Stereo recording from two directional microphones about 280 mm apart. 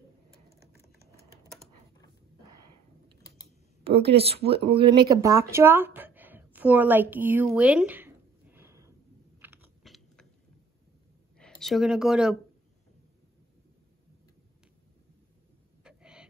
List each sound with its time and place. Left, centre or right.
2.4 s a sound: right
3.8 s speech: right
9.4 s biting: centre
11.6 s speech: centre
15.8 s owl: centre